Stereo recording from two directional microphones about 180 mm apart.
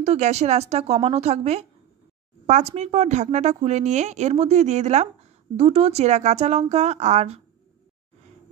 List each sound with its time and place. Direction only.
0.0 s speech: 35° right (ahead or behind)